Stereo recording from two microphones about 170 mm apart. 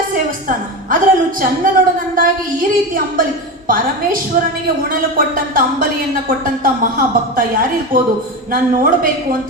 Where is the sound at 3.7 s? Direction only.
55° right (ahead or behind).